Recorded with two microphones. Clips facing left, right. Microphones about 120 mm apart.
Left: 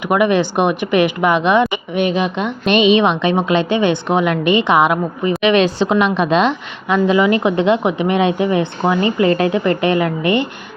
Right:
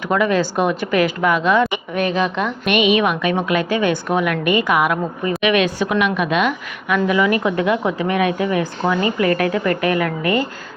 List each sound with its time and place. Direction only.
0.1 s a woman's voice: 20° left (ahead or behind)